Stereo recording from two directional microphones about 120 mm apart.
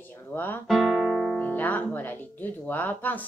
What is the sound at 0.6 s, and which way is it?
Speech, 5° left (ahead or behind).